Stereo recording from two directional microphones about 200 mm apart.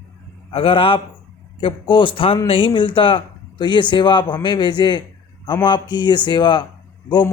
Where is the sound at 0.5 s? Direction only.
25° left (ahead or behind).